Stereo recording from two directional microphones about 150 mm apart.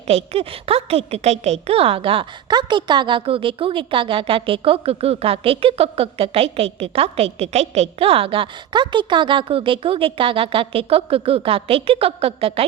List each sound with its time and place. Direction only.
0.1 s a woman's voice: 40° right (ahead or behind)